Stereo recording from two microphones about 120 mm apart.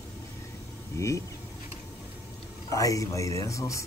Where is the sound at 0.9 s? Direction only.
25° left (ahead or behind).